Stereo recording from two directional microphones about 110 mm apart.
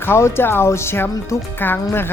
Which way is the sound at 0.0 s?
25° left (ahead or behind).